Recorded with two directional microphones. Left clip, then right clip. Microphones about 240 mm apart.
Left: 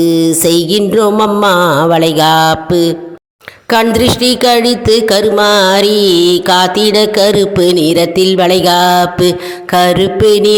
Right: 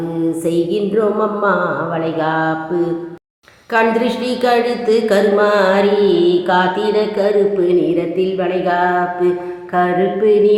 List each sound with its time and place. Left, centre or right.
0.3 s music: left
3.7 s speech: left
9.7 s music: left